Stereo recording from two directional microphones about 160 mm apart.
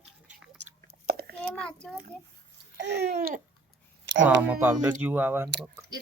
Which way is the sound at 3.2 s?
55° right (ahead or behind).